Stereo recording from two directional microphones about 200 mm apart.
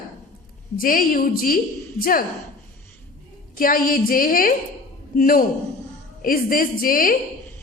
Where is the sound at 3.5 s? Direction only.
45° left (ahead or behind).